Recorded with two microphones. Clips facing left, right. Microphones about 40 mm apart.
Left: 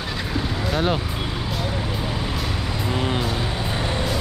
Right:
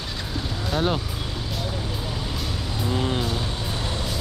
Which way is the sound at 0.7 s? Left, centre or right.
Centre.